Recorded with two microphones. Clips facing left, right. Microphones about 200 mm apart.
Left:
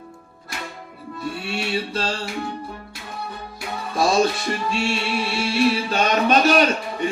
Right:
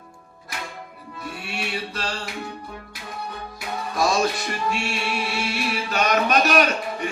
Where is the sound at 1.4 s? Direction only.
25° left (ahead or behind).